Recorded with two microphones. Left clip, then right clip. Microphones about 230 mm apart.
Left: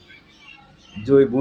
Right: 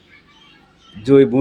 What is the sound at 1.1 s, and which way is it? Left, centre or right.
Speech, right.